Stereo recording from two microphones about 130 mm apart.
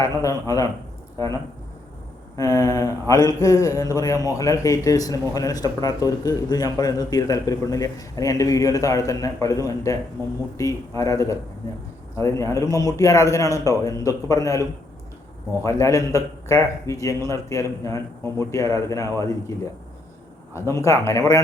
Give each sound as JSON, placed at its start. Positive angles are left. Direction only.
{"t": 0.0, "sound": "a man's voice", "side_deg": 25}
{"t": 2.3, "sound": "a man's voice", "side_deg": 25}
{"t": 20.5, "sound": "a man's voice", "side_deg": 20}